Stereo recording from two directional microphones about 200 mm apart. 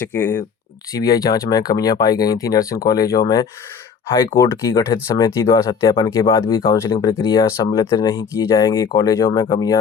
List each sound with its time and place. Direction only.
0.0 s speech: 10° left (ahead or behind)
4.4 s speech: 15° left (ahead or behind)